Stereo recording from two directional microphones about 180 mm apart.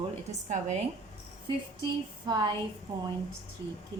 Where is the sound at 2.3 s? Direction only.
25° right (ahead or behind).